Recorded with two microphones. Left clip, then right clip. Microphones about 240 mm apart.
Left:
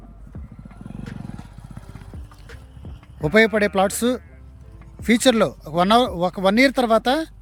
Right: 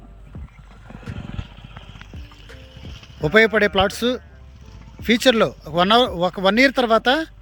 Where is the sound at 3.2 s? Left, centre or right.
Centre.